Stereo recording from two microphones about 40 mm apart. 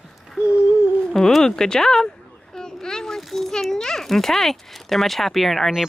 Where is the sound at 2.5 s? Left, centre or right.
Centre.